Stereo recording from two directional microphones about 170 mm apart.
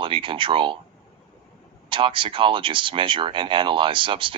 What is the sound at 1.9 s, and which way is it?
Speech, 30° right (ahead or behind).